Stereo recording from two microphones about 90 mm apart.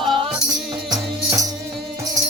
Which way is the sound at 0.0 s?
75° right (ahead or behind).